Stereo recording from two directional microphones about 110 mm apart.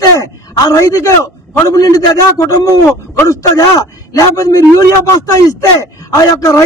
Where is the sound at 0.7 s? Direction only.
30° left (ahead or behind).